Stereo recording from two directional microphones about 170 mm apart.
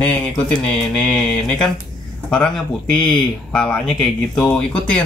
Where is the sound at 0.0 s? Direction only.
5° left (ahead or behind).